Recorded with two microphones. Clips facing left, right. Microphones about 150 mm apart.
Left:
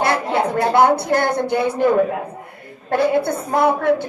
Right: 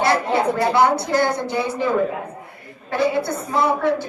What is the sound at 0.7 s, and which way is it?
A woman's voice, 55° left (ahead or behind).